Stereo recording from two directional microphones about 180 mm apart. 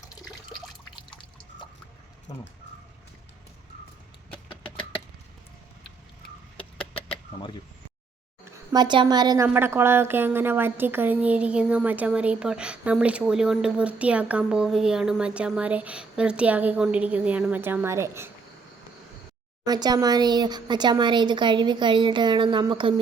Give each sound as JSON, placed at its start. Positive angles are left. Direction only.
{"t": 0.9, "sound": "drip", "side_deg": 25}
{"t": 8.4, "sound": "a woman's voice", "side_deg": -25}
{"t": 19.6, "sound": "speech", "side_deg": -20}